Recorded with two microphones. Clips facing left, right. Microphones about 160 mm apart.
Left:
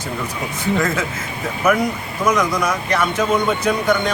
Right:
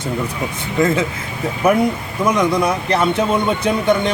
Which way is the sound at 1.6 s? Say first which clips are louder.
Right 3 dB; 30° right (ahead or behind).